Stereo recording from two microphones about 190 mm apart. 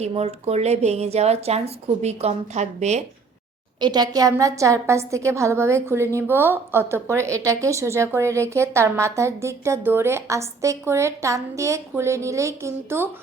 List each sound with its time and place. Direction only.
0.0 s a woman's voice: 35° right (ahead or behind)
3.8 s a woman's voice: 20° right (ahead or behind)